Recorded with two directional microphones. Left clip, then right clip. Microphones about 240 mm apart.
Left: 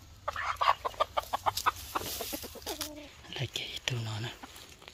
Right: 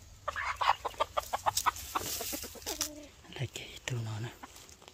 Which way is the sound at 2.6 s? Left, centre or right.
Centre.